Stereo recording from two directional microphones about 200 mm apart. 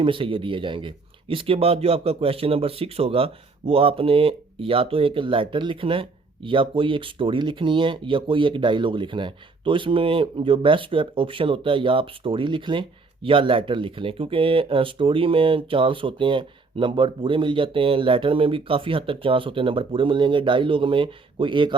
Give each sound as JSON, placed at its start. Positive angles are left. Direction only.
{"t": 0.0, "sound": "speech", "side_deg": -25}